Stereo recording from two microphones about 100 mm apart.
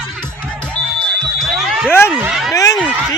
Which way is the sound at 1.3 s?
Centre (ahead or behind).